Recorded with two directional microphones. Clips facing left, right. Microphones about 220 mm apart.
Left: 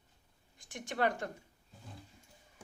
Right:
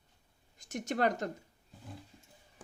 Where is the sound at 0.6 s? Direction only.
40° right (ahead or behind).